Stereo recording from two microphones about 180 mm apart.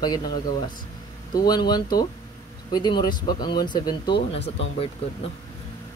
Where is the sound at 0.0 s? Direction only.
25° left (ahead or behind).